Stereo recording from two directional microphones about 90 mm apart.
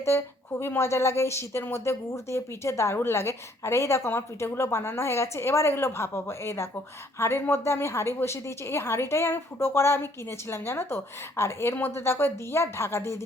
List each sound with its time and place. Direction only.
0.0 s speech: 30° left (ahead or behind)